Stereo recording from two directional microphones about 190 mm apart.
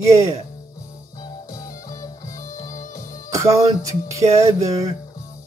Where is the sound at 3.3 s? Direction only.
15° right (ahead or behind).